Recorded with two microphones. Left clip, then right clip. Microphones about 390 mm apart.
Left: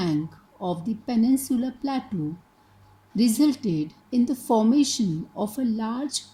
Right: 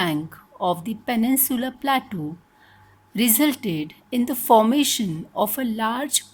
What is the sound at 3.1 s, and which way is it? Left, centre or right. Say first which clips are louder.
A woman's voice: right 1 dB; right.